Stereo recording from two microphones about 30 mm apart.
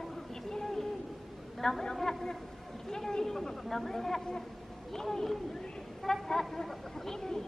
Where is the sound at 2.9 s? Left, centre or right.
Centre.